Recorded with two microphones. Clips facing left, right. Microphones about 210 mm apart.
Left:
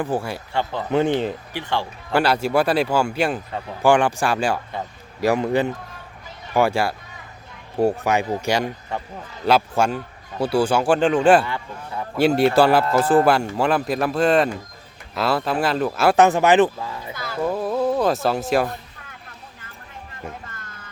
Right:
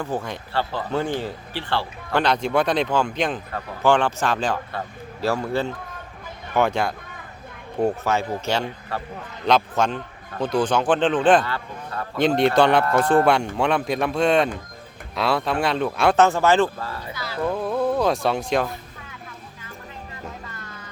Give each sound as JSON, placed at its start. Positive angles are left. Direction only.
{"t": 0.0, "sound": "speech", "side_deg": 10}
{"t": 17.4, "sound": "speech", "side_deg": 5}
{"t": 20.5, "sound": "music", "side_deg": 50}